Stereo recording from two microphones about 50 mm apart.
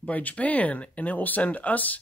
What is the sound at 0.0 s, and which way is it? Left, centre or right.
Speech, left.